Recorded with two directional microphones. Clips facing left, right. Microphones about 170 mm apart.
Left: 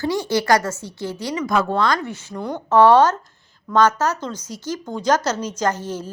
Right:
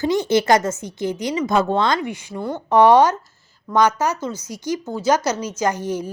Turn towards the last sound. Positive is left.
turn(degrees=-10)  # may be behind; listen again after turning